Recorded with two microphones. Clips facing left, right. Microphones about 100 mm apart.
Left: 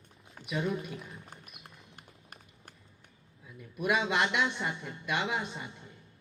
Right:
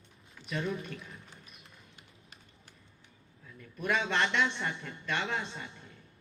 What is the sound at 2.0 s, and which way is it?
Run, 50° left (ahead or behind).